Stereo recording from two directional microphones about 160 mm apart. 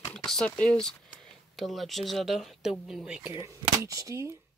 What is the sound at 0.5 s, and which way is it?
Speech, 10° left (ahead or behind).